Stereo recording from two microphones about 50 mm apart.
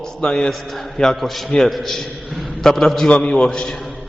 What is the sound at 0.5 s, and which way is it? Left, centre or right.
A man's voice, centre.